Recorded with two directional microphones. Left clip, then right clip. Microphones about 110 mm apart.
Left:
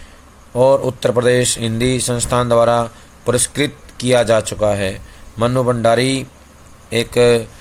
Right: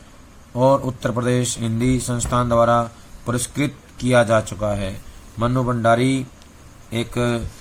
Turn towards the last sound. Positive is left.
turn(degrees=50)  # may be behind; listen again after turning